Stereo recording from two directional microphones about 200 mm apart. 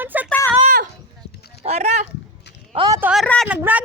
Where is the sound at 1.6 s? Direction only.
35° right (ahead or behind).